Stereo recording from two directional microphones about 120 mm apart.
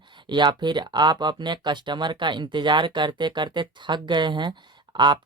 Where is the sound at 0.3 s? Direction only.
40° right (ahead or behind).